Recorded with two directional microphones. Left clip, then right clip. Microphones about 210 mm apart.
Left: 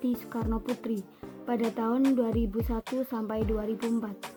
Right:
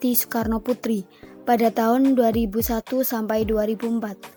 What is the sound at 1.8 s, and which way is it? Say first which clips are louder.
Speech: right 9 dB; 45° right (ahead or behind).